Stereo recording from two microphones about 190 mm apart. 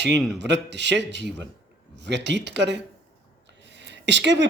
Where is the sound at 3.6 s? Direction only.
65° right (ahead or behind).